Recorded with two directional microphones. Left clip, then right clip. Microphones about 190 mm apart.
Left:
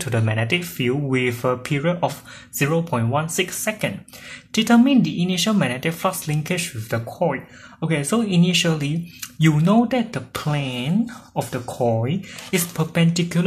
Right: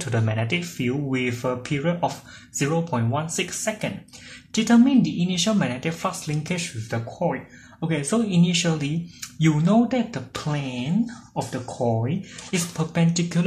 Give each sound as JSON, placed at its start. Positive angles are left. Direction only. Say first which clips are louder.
{"t": 0.0, "sound": "speech", "louder": "left 3 dB", "side_deg": 20}